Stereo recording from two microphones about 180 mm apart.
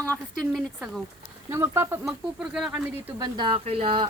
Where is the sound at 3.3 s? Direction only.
30° right (ahead or behind).